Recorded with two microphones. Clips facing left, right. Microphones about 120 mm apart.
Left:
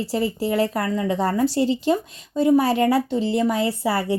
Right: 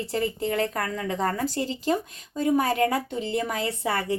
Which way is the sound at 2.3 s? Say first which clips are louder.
Left 6 dB; 30° left (ahead or behind).